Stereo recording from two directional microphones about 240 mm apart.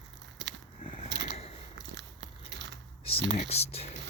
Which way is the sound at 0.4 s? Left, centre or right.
Right.